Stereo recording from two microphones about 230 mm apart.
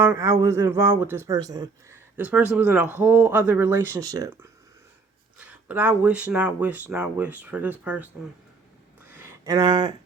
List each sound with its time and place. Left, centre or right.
0.1 s speech: centre
5.5 s speech: centre
9.1 s a sound: centre